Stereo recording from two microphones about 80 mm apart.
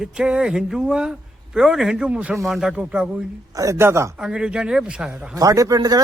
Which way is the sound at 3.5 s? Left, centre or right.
Right.